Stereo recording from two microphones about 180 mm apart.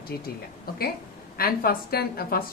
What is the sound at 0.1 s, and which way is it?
Speech, 55° left (ahead or behind).